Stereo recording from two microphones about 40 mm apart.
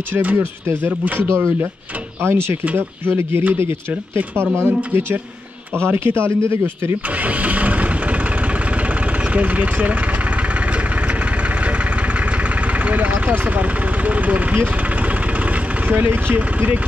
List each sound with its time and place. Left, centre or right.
0.8 s speech: right
2.2 s speech: right
3.1 s speech: right
3.5 s speech: right
4.6 s speech: right
5.9 s speech: right
7.2 s music: right
9.2 s speech: right
12.4 s vehicle: right
16.3 s speech: right